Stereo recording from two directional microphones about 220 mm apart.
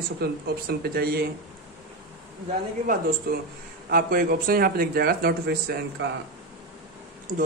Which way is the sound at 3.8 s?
40° right (ahead or behind).